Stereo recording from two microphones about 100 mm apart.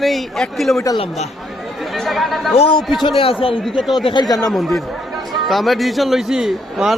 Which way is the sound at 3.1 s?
60° left (ahead or behind).